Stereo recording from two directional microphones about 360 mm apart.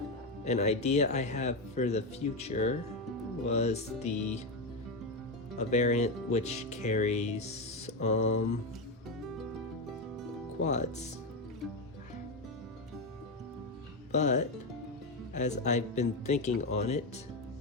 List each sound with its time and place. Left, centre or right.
0.4 s speech: centre
3.5 s music: centre
5.5 s speech: centre
10.6 s speech: centre
14.1 s speech: centre